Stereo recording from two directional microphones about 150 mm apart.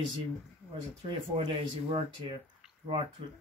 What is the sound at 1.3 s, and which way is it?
Speech, 40° right (ahead or behind).